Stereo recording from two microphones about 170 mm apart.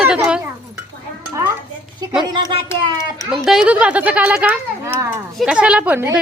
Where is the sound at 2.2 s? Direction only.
25° right (ahead or behind).